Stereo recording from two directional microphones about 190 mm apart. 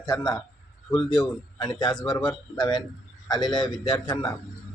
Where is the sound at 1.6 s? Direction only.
20° left (ahead or behind).